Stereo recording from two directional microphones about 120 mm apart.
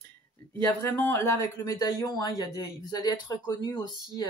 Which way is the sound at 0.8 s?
20° left (ahead or behind).